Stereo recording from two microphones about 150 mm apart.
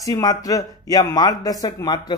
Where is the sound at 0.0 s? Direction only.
25° left (ahead or behind).